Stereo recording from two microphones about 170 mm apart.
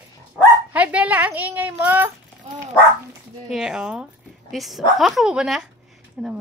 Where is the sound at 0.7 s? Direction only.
10° right (ahead or behind).